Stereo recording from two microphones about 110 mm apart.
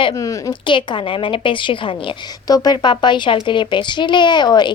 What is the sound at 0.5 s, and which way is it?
A woman's voice, 50° left (ahead or behind).